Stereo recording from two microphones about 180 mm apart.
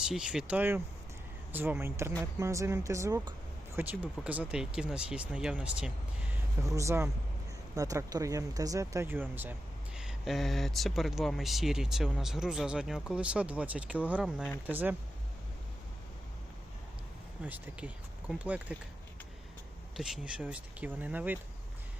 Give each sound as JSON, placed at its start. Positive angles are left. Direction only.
{"t": 0.0, "sound": "speech", "side_deg": -5}
{"t": 6.6, "sound": "speech", "side_deg": -15}
{"t": 17.4, "sound": "speech", "side_deg": -10}
{"t": 20.0, "sound": "speech", "side_deg": -5}